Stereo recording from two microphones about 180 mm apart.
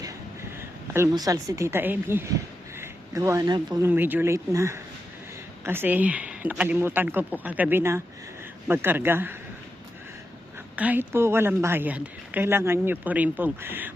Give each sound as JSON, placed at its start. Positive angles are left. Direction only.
{"t": 0.6, "sound": "a woman's voice", "side_deg": -15}
{"t": 3.8, "sound": "speech", "side_deg": -10}
{"t": 10.8, "sound": "speech", "side_deg": -10}